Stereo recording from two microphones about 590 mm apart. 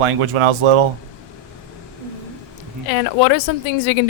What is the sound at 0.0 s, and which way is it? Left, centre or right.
Speech, right.